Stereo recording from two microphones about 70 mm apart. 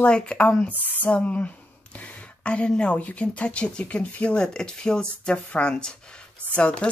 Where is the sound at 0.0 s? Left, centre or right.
Centre.